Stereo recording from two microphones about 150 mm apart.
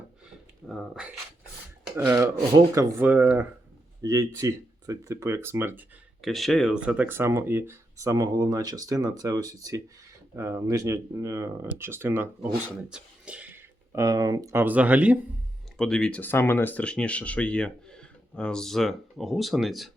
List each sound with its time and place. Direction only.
0.7 s speech: 5° right (ahead or behind)
2.0 s speech: 20° right (ahead or behind)
6.2 s speech: centre (ahead or behind)
15.8 s speech: 5° left (ahead or behind)